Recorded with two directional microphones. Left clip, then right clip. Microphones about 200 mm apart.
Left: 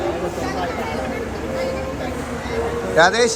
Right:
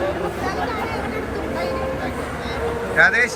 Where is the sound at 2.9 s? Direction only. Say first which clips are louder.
Left 1 dB; 15° left (ahead or behind).